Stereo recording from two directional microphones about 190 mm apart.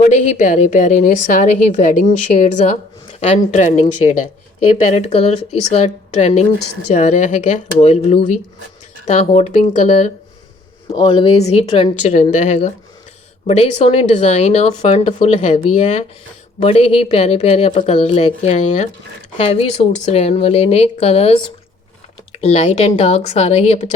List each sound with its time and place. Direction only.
0.0 s a woman's voice: 40° left (ahead or behind)
10.9 s a woman's voice: 25° left (ahead or behind)